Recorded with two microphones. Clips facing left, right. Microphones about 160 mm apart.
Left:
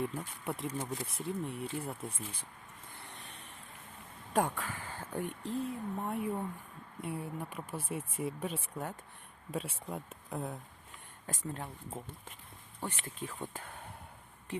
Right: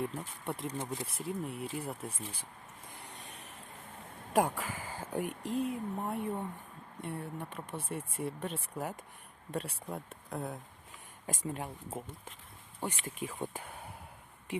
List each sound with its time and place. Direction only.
0.0 s speech: centre (ahead or behind)
0.7 s speech: 20° right (ahead or behind)
1.0 s speech: centre (ahead or behind)
4.4 s speech: 10° right (ahead or behind)
6.0 s speech: centre (ahead or behind)
11.3 s speech: 15° right (ahead or behind)
12.8 s speech: 15° right (ahead or behind)